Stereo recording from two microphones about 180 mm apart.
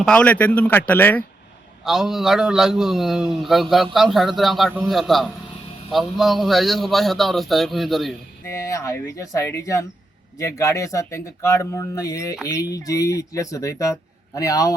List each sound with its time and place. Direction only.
0.0 s speech: 5° left (ahead or behind)
1.8 s a man's voice: centre (ahead or behind)
8.5 s speech: 15° left (ahead or behind)